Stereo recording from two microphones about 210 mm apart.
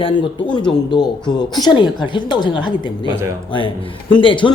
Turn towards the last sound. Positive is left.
turn(degrees=25)  # may be behind; listen again after turning